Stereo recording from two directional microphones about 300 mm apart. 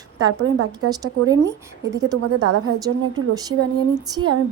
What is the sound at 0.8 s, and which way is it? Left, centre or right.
Speech, centre.